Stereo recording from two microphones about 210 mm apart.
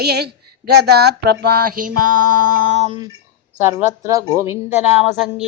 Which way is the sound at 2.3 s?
90° right.